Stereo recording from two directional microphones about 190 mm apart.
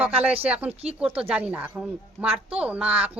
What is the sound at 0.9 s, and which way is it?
A woman's voice, 5° right (ahead or behind).